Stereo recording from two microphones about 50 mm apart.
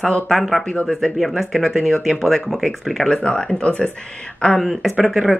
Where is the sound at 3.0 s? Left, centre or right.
Centre.